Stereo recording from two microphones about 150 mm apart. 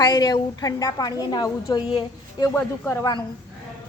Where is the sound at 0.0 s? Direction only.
25° left (ahead or behind).